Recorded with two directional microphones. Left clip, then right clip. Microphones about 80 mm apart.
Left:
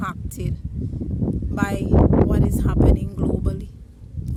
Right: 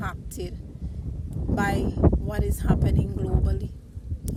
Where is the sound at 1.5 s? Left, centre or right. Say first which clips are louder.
Left 3 dB; left.